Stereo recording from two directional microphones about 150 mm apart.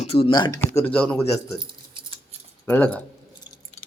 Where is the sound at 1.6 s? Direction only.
30° right (ahead or behind).